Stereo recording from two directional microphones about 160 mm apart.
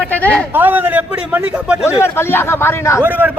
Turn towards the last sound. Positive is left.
turn(degrees=-10)  # may be behind; listen again after turning